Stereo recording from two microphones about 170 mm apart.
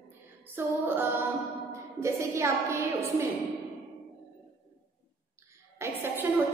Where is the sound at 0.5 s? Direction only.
10° right (ahead or behind).